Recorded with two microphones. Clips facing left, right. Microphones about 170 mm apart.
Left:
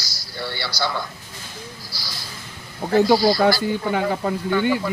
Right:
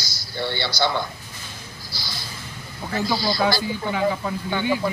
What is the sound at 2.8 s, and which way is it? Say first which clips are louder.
Speech: left 9 dB; 55° left (ahead or behind).